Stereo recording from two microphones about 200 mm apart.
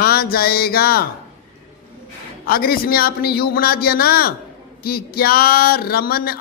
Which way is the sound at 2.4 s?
50° left (ahead or behind).